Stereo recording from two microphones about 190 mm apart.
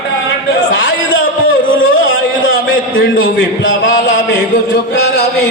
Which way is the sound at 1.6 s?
90° left.